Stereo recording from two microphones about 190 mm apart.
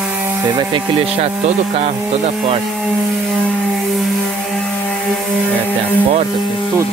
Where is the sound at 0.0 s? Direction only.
10° right (ahead or behind); by 2.0 s 35° right (ahead or behind).